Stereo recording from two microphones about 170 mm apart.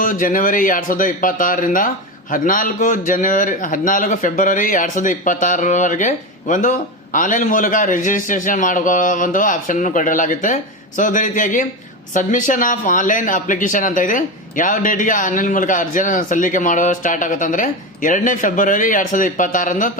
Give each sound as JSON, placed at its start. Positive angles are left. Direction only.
{"t": 0.0, "sound": "a man's voice", "side_deg": 50}